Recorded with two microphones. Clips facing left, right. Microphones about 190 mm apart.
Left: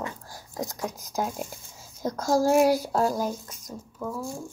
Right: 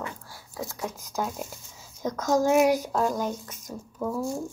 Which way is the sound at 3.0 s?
5° left (ahead or behind).